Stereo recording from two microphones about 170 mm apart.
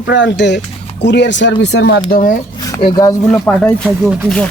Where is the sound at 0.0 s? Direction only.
90° left.